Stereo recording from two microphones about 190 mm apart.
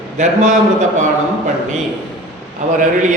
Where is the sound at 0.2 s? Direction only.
40° right (ahead or behind).